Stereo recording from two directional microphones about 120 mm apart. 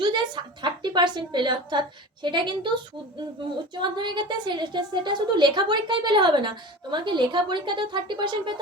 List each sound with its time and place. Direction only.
0.0 s a woman's voice: 40° right (ahead or behind)
3.8 s a woman's voice: 40° right (ahead or behind)